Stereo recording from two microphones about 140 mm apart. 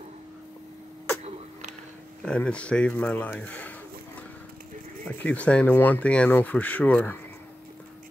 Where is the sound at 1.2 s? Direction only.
55° right (ahead or behind).